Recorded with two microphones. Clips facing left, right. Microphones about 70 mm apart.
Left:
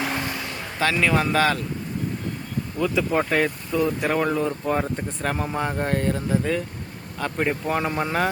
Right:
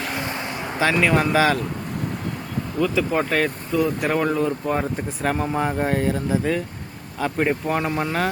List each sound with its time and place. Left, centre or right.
0.3 s vehicle: right
0.8 s speech: centre
2.8 s speech: centre